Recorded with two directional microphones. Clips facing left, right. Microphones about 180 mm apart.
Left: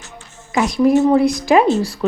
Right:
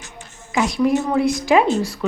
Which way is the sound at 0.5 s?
35° left (ahead or behind).